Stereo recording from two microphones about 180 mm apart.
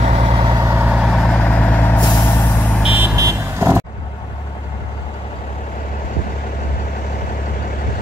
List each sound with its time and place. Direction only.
0.0 s vehicle: 35° right (ahead or behind); by 2.5 s 15° left (ahead or behind)
2.7 s vehicle: 5° right (ahead or behind)
3.2 s vehicle: 15° right (ahead or behind)